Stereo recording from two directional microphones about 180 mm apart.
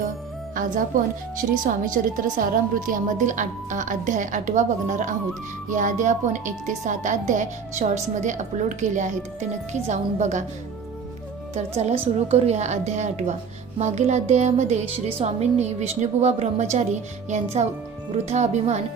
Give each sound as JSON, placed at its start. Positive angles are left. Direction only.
{"t": 0.5, "sound": "a woman's voice", "side_deg": -45}
{"t": 12.3, "sound": "a woman's voice", "side_deg": -40}